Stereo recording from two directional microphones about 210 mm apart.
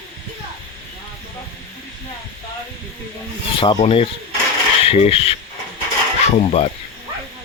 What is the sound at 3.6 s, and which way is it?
Speech, 25° left (ahead or behind).